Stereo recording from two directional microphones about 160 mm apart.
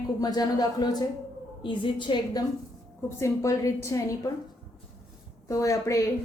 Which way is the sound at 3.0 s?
20° left (ahead or behind).